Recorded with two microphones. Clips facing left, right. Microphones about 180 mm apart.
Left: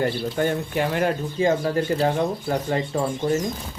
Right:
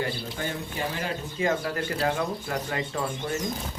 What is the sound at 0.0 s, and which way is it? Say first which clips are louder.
Speech: left 8 dB; 55° left (ahead or behind).